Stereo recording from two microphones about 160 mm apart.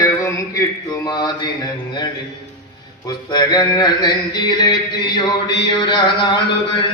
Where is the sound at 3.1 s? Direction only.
25° left (ahead or behind).